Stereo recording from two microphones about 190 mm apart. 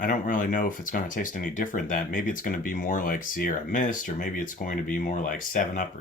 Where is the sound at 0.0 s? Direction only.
45° left (ahead or behind).